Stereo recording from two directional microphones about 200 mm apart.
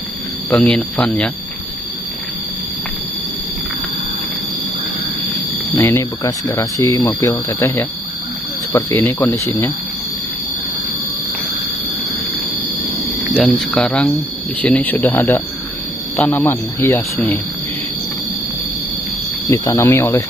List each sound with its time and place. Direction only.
0.5 s speech: 5° left (ahead or behind)
5.8 s speech: 10° left (ahead or behind)
13.6 s speech: centre (ahead or behind)
19.5 s speech: 15° left (ahead or behind)